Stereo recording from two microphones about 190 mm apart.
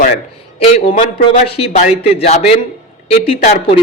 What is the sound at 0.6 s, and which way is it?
A man's voice, 35° left (ahead or behind).